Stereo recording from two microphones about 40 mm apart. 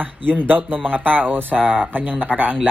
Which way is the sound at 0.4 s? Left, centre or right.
Right.